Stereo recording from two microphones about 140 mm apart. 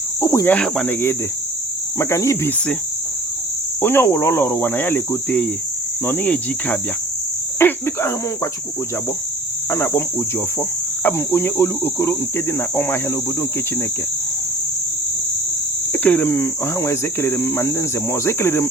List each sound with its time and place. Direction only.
0.2 s speech: 20° left (ahead or behind)
0.5 s cricket: 10° left (ahead or behind)
2.0 s speech: 20° left (ahead or behind)
3.8 s cricket: 15° left (ahead or behind)
7.6 s speech: 20° left (ahead or behind)
9.6 s cricket: 15° left (ahead or behind)
15.9 s speech: 10° left (ahead or behind)